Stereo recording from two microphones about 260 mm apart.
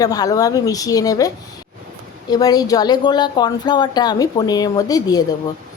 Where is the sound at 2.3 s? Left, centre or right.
Centre.